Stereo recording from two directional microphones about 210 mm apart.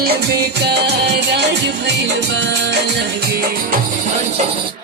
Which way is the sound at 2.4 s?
55° right (ahead or behind).